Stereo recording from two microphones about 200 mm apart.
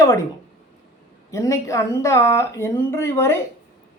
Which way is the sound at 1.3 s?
15° left (ahead or behind).